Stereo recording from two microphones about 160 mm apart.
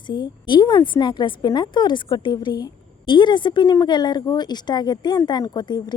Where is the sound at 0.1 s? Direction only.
30° left (ahead or behind).